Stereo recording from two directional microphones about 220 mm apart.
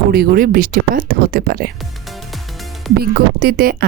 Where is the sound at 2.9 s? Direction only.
45° right (ahead or behind).